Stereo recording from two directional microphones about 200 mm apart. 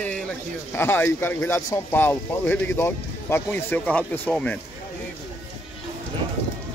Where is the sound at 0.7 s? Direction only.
10° left (ahead or behind).